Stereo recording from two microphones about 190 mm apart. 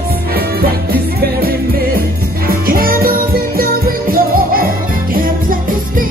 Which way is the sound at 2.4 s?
50° right (ahead or behind).